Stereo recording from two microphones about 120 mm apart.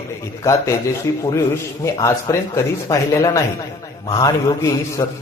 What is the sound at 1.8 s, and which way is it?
A man's voice, 25° left (ahead or behind).